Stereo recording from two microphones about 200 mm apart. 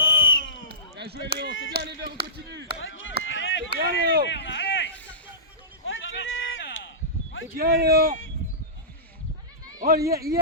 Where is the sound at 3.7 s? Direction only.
50° right (ahead or behind).